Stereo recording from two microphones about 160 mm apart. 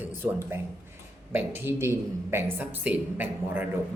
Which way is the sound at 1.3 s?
10° right (ahead or behind).